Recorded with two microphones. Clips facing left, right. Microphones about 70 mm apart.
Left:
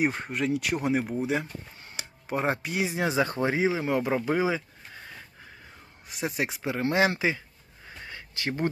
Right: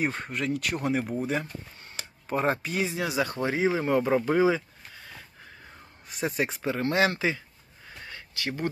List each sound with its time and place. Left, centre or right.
0.0 s speech: centre
1.8 s chop: centre
2.9 s speech: left
3.8 s speech: centre
6.1 s speech: centre
8.0 s a sound: left